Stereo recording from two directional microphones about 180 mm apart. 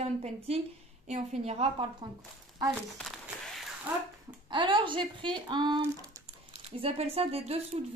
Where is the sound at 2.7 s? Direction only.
Centre (ahead or behind).